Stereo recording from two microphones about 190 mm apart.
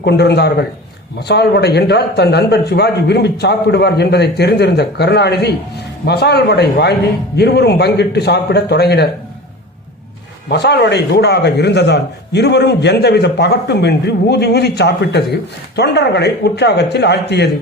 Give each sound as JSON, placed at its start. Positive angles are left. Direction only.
{"t": 0.0, "sound": "a man's voice", "side_deg": 60}
{"t": 10.5, "sound": "a man's voice", "side_deg": 60}